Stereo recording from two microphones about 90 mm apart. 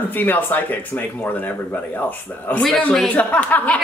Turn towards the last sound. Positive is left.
turn(degrees=15)  # may be behind; listen again after turning